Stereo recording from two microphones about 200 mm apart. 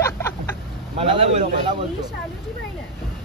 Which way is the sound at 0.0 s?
15° left (ahead or behind).